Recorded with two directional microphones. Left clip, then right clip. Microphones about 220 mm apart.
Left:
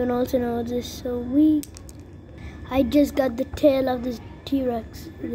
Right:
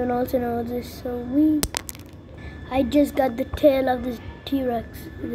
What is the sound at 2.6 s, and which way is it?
A child's voice, 20° left (ahead or behind).